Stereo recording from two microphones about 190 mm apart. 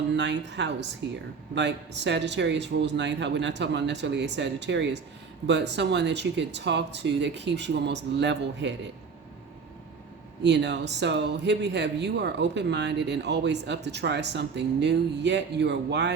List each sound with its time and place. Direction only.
0.1 s speech: 65° right (ahead or behind)
10.4 s speech: 65° right (ahead or behind)